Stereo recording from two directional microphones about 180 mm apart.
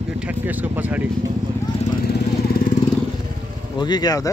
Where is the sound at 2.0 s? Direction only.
50° left (ahead or behind).